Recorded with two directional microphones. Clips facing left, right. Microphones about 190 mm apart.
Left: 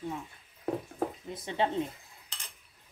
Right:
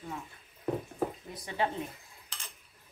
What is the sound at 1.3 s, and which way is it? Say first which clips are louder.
Speech: left 3 dB; 25° left (ahead or behind).